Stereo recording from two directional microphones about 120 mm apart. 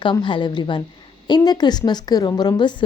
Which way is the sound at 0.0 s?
40° left (ahead or behind).